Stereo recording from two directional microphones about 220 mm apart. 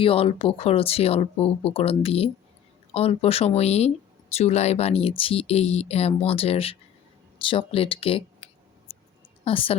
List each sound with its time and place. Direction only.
0.0 s a woman's voice: 25° left (ahead or behind)